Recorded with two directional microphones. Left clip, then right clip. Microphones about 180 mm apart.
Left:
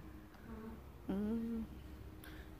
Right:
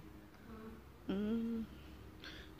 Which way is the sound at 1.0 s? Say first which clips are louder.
Right 1 dB; centre (ahead or behind).